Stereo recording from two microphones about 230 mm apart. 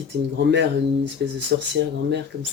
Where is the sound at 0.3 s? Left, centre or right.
Right.